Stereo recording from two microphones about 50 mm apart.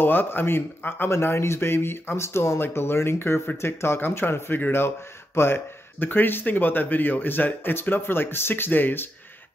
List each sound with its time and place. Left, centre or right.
0.0 s speech: left
1.1 s speech: left
2.6 s speech: left
4.8 s speech: left
6.0 s speech: left